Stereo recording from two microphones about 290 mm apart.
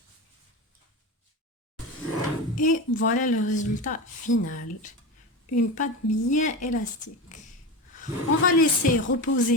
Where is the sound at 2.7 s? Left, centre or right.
Left.